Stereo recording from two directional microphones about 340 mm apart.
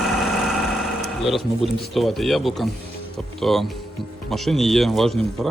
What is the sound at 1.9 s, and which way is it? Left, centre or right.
Speech, centre.